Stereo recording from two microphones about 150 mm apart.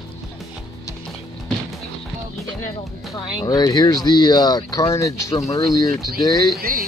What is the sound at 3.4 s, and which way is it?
Speech, 25° left (ahead or behind).